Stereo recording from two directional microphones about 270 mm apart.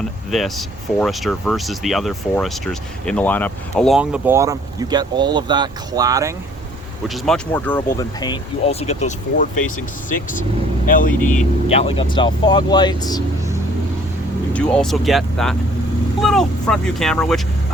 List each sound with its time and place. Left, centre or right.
0.3 s speech: centre
7.1 s speech: centre
14.5 s speech: centre